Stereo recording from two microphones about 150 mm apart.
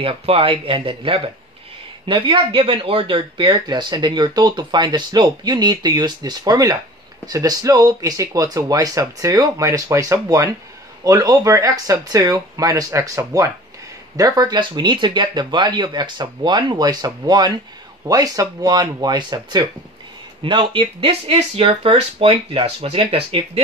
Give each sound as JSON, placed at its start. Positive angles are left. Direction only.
{"t": 0.0, "sound": "speech", "side_deg": -35}